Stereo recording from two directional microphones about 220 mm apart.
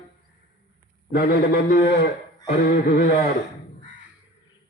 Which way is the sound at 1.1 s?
45° left (ahead or behind).